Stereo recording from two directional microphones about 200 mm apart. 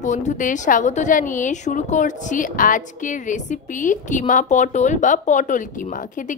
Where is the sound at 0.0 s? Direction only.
40° left (ahead or behind).